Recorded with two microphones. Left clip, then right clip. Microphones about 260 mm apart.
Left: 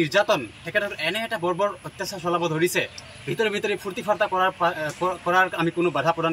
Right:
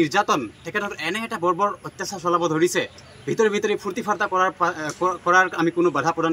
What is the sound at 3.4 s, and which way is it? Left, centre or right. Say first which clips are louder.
Speech: right 3 dB; centre.